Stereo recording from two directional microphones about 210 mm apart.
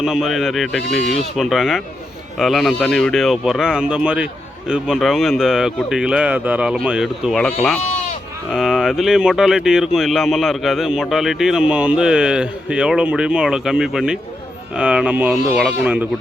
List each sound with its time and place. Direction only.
0.0 s speech: centre (ahead or behind)
7.8 s speech: 30° left (ahead or behind)
8.5 s speech: centre (ahead or behind)